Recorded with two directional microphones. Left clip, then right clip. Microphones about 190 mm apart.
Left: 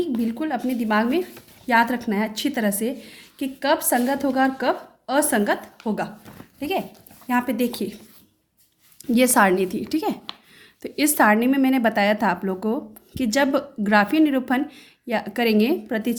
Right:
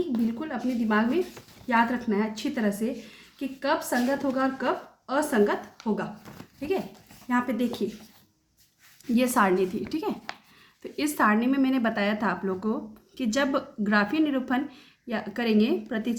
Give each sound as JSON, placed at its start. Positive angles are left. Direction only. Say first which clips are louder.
{"t": 0.3, "sound": "a woman's voice", "louder": "left 5 dB", "side_deg": 45}
{"t": 5.8, "sound": "a sound", "louder": "left 2 dB", "side_deg": 20}
{"t": 6.6, "sound": "a woman's voice", "louder": "left 4 dB", "side_deg": 45}
{"t": 9.1, "sound": "a woman's voice", "louder": "left 6 dB", "side_deg": 35}